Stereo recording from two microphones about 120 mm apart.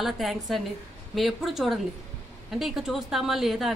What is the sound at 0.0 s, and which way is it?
A woman's voice, centre (ahead or behind).